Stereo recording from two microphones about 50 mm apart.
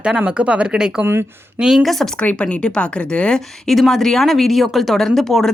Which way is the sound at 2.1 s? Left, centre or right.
Left.